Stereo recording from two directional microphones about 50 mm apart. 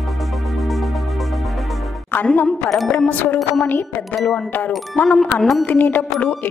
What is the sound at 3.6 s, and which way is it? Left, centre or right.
Speech, left.